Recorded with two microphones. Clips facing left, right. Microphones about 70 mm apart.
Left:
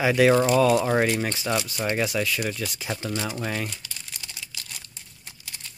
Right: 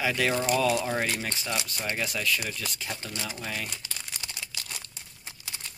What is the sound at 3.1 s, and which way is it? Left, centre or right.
Speech, left.